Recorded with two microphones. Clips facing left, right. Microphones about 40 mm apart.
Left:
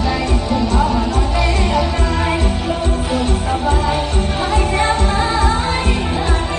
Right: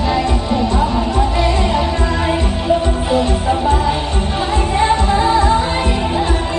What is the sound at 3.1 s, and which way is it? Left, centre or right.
Music, right.